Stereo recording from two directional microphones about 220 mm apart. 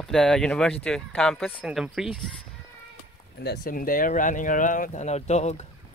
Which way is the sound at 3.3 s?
45° left (ahead or behind).